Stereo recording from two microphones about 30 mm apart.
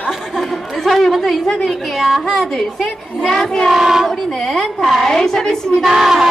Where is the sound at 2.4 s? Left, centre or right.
Centre.